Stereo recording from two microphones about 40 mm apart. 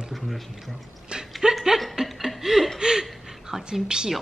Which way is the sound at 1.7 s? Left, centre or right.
Centre.